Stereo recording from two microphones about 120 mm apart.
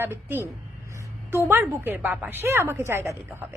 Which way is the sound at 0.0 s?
20° right (ahead or behind).